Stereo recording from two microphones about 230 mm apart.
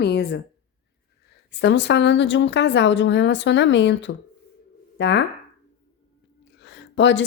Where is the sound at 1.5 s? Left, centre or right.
Left.